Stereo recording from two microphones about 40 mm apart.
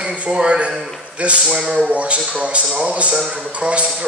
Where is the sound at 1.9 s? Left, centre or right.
Right.